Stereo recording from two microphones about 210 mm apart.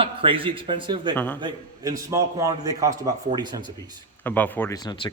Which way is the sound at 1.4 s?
20° right (ahead or behind).